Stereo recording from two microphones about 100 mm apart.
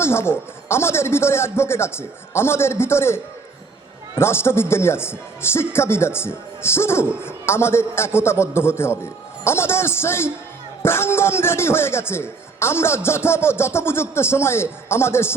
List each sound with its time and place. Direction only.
0.0 s speech: 25° left (ahead or behind)
4.2 s speech: 25° left (ahead or behind)